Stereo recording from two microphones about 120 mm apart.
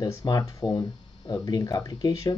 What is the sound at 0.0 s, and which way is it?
Speech, 35° left (ahead or behind).